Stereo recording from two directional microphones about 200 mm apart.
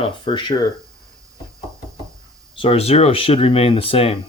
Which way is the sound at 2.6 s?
30° left (ahead or behind).